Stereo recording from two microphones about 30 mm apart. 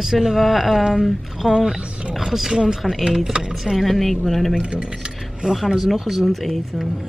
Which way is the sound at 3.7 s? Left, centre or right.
Centre.